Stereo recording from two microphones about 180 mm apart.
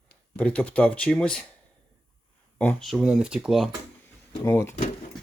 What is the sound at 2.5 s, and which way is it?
Speech, 5° left (ahead or behind).